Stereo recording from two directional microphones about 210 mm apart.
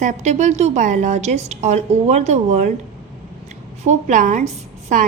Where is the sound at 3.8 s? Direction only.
35° right (ahead or behind).